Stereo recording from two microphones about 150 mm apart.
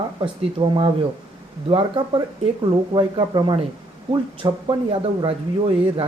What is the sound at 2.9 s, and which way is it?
A woman's voice, 30° right (ahead or behind).